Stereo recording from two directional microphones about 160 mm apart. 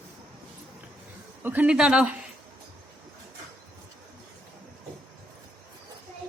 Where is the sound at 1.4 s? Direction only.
10° right (ahead or behind).